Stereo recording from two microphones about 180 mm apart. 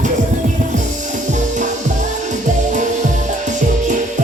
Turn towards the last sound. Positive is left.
turn(degrees=-45)  # may be behind; listen again after turning